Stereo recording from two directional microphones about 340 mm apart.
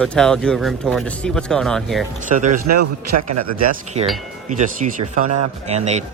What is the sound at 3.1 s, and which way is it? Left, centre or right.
Speech, right.